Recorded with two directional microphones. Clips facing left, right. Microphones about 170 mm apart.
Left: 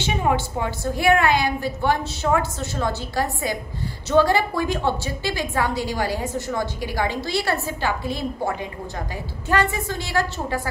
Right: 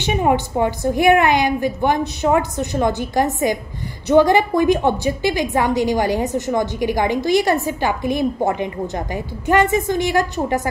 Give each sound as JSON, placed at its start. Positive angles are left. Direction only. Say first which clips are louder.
{"t": 0.0, "sound": "a woman's voice", "louder": "right 4 dB", "side_deg": -20}